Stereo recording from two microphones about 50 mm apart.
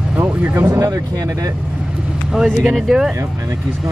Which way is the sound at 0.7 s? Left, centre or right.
Right.